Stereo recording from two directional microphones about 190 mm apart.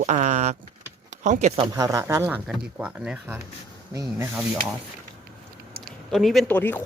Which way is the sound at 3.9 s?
15° right (ahead or behind).